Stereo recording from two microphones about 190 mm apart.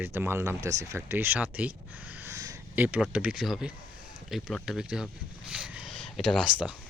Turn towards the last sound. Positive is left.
turn(degrees=-5)  # may be behind; listen again after turning